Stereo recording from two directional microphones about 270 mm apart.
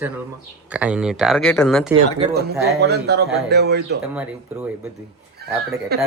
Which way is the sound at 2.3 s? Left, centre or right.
Right.